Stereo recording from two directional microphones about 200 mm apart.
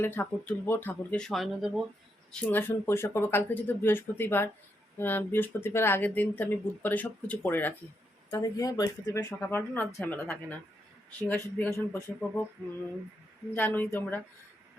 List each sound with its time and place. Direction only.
0.0 s speech: 10° left (ahead or behind)
13.5 s speech: 10° left (ahead or behind)